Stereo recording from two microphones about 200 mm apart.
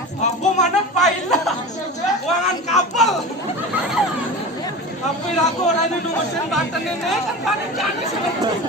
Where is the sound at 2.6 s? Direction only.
35° left (ahead or behind).